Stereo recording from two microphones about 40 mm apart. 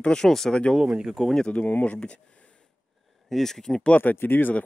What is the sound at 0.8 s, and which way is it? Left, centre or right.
Speech, centre.